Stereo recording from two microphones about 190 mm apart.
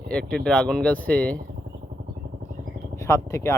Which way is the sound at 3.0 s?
15° left (ahead or behind).